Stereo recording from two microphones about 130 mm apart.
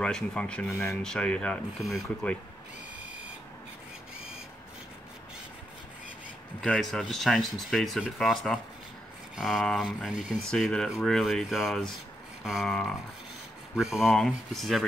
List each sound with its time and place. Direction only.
0.0 s speech: 10° left (ahead or behind)
0.7 s speech: 20° left (ahead or behind)
1.0 s speech: 5° left (ahead or behind)
6.6 s speech: 5° left (ahead or behind)